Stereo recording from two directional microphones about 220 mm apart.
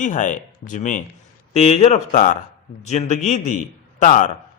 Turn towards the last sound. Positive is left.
turn(degrees=35)  # may be behind; listen again after turning